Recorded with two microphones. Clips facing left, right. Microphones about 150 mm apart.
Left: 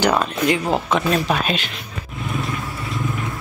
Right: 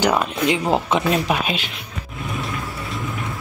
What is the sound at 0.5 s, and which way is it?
Speech, 20° right (ahead or behind).